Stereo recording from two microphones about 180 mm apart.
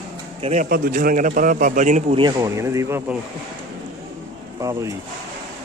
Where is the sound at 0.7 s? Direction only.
55° right (ahead or behind).